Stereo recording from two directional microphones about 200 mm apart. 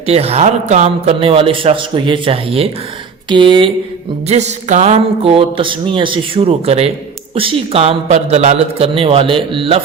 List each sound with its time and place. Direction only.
0.0 s a man's voice: 30° right (ahead or behind)